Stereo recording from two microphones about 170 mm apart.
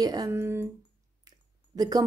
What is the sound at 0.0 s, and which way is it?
Speech, 20° right (ahead or behind).